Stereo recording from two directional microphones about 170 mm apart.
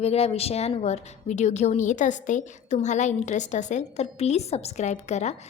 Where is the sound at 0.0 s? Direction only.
35° left (ahead or behind).